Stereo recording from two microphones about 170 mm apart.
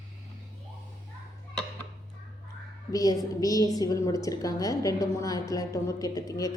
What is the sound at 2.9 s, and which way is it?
A woman's voice, 20° left (ahead or behind).